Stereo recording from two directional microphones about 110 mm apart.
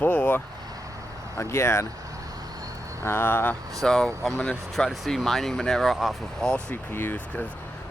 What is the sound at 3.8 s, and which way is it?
Speech, 5° left (ahead or behind).